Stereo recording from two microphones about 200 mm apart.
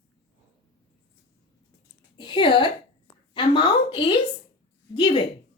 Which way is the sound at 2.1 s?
25° left (ahead or behind).